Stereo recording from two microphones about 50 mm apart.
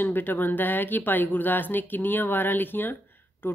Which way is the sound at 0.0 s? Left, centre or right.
Left.